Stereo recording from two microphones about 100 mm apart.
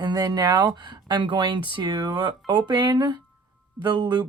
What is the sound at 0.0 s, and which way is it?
Speech, 40° right (ahead or behind).